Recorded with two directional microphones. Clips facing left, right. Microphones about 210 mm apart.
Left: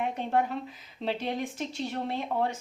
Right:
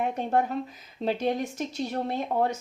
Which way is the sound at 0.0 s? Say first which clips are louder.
Right 2 dB; 45° right (ahead or behind).